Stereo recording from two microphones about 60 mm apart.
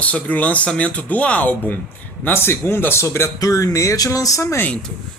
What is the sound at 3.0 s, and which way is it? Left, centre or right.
Speech, left.